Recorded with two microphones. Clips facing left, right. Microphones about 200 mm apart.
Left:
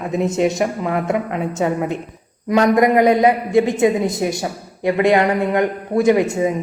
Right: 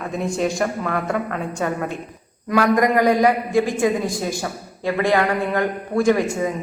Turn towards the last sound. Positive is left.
turn(degrees=20)  # may be behind; listen again after turning